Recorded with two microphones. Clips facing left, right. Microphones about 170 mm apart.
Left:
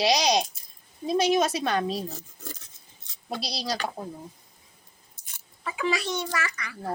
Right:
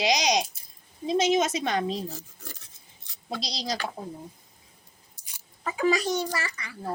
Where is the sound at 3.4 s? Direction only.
20° right (ahead or behind).